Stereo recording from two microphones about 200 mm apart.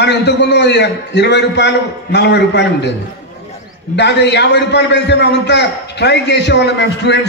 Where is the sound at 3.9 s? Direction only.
60° left (ahead or behind).